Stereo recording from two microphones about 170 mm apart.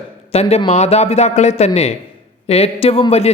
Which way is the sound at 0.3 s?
35° left (ahead or behind).